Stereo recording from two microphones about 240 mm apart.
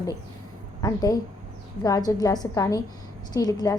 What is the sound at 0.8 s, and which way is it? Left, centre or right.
A woman's voice, centre.